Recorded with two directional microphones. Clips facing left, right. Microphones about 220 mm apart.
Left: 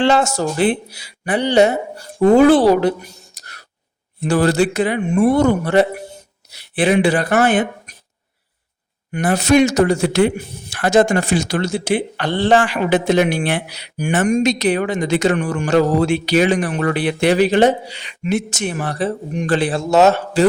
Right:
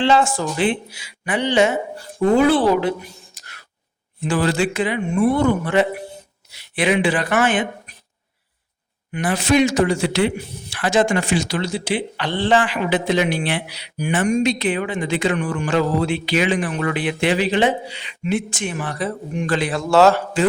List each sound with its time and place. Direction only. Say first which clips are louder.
0.0 s a man's voice: left 2 dB; 45° left (ahead or behind)
9.1 s a man's voice: left 4 dB; 40° left (ahead or behind); by 20.2 s 20° left (ahead or behind)